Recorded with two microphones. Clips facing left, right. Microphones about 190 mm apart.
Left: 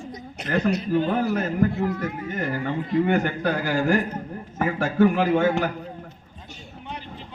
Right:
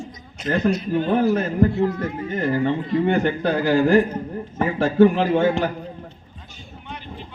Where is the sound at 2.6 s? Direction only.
25° right (ahead or behind).